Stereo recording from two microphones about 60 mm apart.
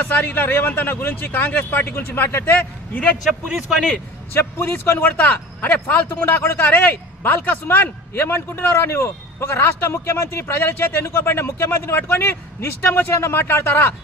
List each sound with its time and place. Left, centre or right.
0.0 s a man's voice: left
3.3 s speech: centre
4.3 s a man's voice: left